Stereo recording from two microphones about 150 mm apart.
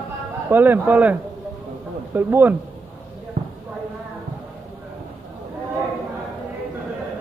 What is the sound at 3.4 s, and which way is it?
Clip-clop, 55° right (ahead or behind).